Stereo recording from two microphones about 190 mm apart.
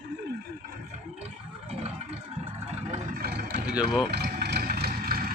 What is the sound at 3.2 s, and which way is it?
Vehicle, 55° right (ahead or behind).